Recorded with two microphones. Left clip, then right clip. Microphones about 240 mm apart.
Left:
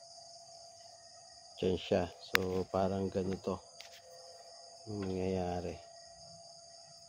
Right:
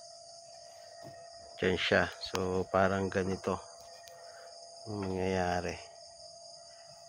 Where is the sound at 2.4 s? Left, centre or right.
Right.